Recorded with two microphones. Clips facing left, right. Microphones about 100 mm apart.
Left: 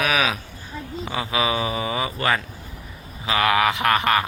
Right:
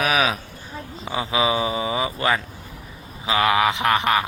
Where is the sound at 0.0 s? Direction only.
35° right (ahead or behind).